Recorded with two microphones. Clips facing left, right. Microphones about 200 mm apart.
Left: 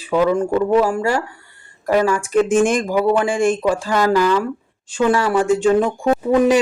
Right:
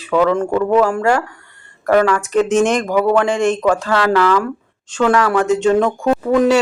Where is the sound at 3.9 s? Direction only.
15° left (ahead or behind).